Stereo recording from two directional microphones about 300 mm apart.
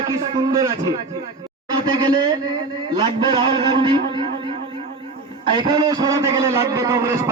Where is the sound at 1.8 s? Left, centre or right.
Centre.